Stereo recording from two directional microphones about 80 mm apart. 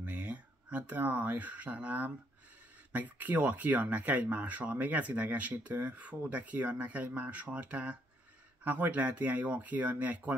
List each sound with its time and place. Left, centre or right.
0.0 s speech: centre